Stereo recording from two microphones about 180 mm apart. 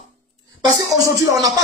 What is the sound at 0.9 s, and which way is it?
Speech, 20° right (ahead or behind).